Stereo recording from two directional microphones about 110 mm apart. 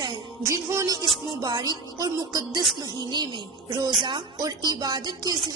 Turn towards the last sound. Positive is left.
turn(degrees=-40)  # may be behind; listen again after turning